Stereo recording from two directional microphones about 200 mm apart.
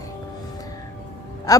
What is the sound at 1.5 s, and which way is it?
Speech, 20° left (ahead or behind).